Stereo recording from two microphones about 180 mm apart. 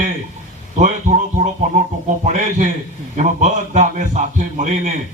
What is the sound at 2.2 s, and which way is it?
A man's voice, 40° right (ahead or behind).